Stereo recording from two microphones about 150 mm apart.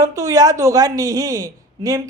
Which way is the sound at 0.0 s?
20° right (ahead or behind).